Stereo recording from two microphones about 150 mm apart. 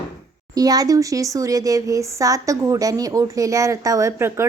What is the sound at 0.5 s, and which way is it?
Speech, 25° right (ahead or behind).